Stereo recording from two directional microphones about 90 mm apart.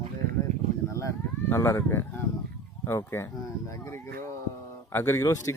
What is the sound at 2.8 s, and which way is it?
Speech, 30° left (ahead or behind).